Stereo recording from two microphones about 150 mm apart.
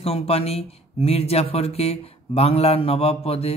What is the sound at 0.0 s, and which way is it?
Speech, 40° left (ahead or behind).